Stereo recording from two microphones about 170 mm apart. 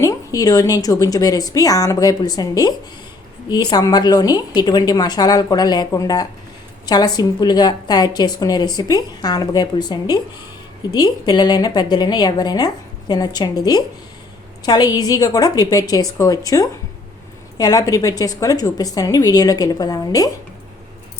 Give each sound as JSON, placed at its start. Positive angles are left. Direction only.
{"t": 0.0, "sound": "a woman's voice", "side_deg": 20}